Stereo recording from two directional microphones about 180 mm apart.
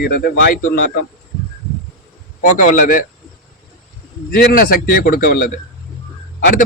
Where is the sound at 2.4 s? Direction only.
45° left (ahead or behind).